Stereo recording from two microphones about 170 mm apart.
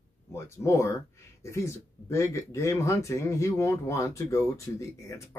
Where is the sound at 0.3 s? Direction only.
15° left (ahead or behind).